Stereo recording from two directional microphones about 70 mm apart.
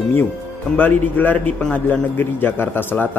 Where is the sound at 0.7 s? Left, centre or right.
Left.